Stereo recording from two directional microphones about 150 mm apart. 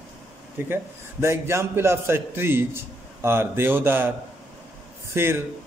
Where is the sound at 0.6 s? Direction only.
15° right (ahead or behind).